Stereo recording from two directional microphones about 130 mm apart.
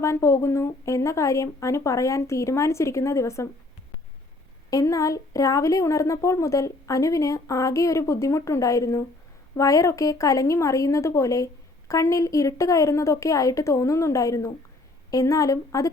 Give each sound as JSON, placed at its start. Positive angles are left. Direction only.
{"t": 0.0, "sound": "a woman's voice", "side_deg": 20}
{"t": 4.7, "sound": "a woman's voice", "side_deg": 25}